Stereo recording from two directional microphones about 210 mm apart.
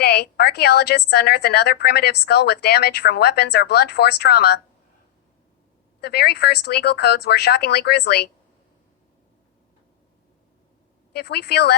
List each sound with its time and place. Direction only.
0.0 s a woman's voice: 50° left (ahead or behind)
6.0 s a woman's voice: 50° left (ahead or behind)
11.1 s a woman's voice: 50° left (ahead or behind)